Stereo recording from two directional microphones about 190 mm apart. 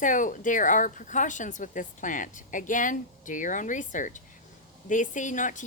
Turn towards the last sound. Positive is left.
turn(degrees=40)  # may be behind; listen again after turning